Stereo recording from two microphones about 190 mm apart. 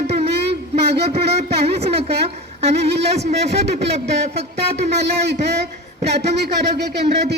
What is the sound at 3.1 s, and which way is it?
Speech, 35° right (ahead or behind).